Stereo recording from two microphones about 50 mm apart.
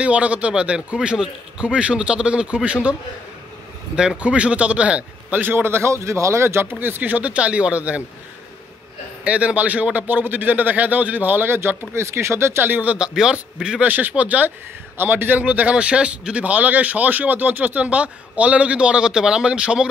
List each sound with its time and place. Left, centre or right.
0.0 s a man's voice: right
4.2 s a man's voice: right
5.5 s a man's voice: right
5.9 s speech: right
6.7 s a man's voice: right
7.0 s a man's voice: right
9.2 s a man's voice: right
12.6 s a man's voice: right
13.1 s a man's voice: centre
13.8 s a man's voice: right
15.0 s a man's voice: right
15.4 s a man's voice: right
17.8 s a man's voice: right